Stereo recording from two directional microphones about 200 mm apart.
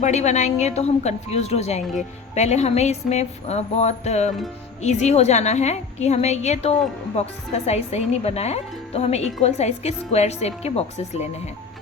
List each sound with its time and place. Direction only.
0.0 s speech: 35° left (ahead or behind)